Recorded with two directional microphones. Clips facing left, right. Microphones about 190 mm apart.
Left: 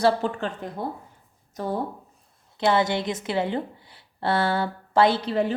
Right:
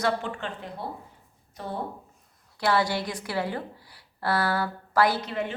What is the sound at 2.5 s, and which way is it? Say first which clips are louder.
A woman's voice: left 3 dB; 20° left (ahead or behind).